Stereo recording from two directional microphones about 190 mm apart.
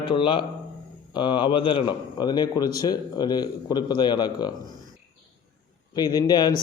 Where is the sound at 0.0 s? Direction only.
25° left (ahead or behind).